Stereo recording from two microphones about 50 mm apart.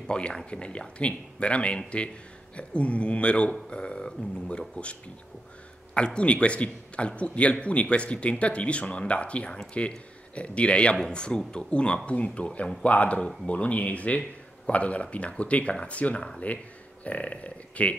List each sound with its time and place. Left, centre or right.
0.0 s a man's voice: centre